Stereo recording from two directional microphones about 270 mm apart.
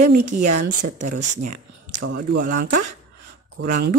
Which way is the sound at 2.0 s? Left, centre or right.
Right.